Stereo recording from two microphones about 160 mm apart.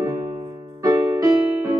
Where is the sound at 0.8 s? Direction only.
25° right (ahead or behind).